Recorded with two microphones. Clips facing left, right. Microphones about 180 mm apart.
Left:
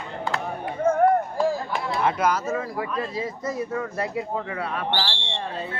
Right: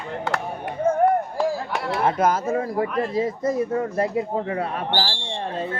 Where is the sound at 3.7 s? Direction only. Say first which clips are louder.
Right 5 dB; 40° right (ahead or behind).